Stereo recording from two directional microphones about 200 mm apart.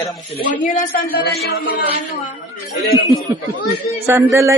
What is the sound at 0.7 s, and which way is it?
Speech, 40° left (ahead or behind).